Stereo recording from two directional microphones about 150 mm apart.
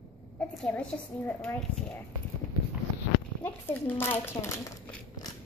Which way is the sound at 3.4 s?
15° left (ahead or behind).